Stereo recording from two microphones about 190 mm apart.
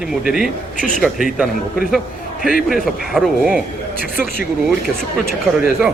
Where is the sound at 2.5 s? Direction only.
45° left (ahead or behind).